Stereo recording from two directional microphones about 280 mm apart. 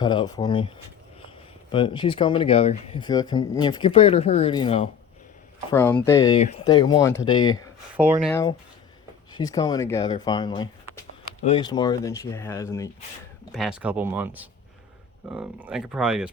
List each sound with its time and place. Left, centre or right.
0.0 s speech: centre
1.7 s speech: centre
5.7 s speech: centre
7.9 s speech: centre
8.3 s speech: centre
13.5 s speech: centre